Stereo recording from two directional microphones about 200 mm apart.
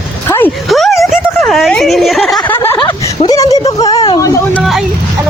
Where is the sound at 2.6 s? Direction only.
10° left (ahead or behind).